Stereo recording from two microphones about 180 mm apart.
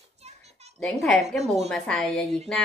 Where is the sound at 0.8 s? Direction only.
5° left (ahead or behind).